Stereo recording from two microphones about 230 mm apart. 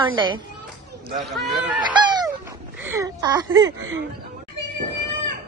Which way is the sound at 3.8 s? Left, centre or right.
Right.